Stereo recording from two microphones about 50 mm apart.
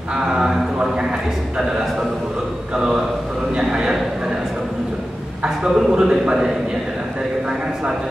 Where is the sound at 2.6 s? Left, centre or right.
Centre.